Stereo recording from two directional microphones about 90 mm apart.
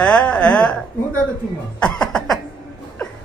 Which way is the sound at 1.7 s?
10° left (ahead or behind).